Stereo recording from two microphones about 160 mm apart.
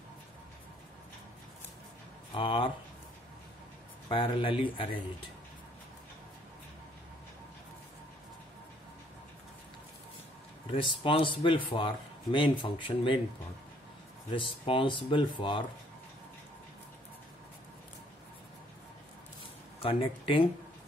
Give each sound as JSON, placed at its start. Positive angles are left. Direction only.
{"t": 2.3, "sound": "speech", "side_deg": 30}
{"t": 4.1, "sound": "speech", "side_deg": 30}
{"t": 10.7, "sound": "speech", "side_deg": 35}
{"t": 14.3, "sound": "speech", "side_deg": 30}
{"t": 19.8, "sound": "speech", "side_deg": 35}